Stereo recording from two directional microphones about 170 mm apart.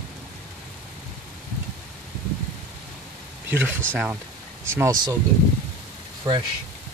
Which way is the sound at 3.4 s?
10° right (ahead or behind).